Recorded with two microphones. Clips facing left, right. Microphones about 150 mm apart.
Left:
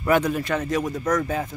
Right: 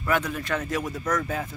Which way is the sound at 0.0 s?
30° left (ahead or behind).